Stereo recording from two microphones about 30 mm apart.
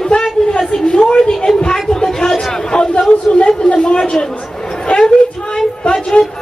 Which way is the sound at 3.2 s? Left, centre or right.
Left.